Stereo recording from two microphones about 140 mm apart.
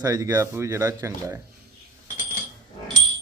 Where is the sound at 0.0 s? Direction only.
25° right (ahead or behind).